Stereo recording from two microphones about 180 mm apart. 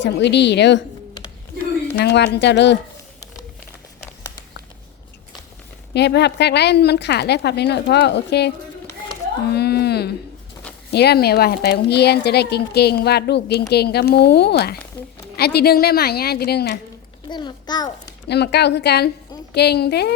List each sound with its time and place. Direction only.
0.0 s a woman's voice: 70° left (ahead or behind)
2.0 s a woman's voice: 70° left (ahead or behind)
5.9 s a woman's voice: 70° left (ahead or behind)
9.5 s a sound: 65° left (ahead or behind)
10.9 s speech: 65° left (ahead or behind)
17.2 s a child's voice: 25° left (ahead or behind)
18.3 s a woman's voice: 65° left (ahead or behind)